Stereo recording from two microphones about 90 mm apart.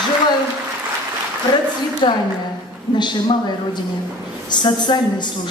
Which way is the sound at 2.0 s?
55° left (ahead or behind).